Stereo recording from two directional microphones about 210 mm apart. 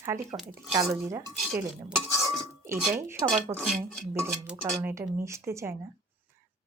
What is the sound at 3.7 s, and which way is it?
Speech, centre (ahead or behind).